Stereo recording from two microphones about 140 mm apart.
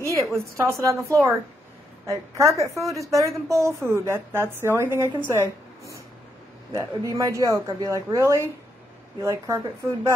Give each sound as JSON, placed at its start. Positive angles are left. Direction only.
{"t": 0.3, "sound": "a woman's voice", "side_deg": -20}